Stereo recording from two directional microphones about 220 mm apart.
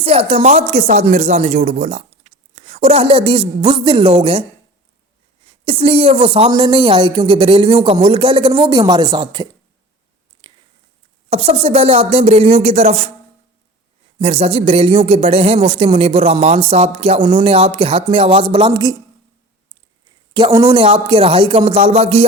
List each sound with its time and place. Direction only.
0.0 s speech: 25° right (ahead or behind)
5.6 s speech: 25° right (ahead or behind)
10.4 s a sound: 20° right (ahead or behind)
11.3 s speech: 25° right (ahead or behind)
14.2 s speech: 25° right (ahead or behind)
20.3 s speech: 20° right (ahead or behind)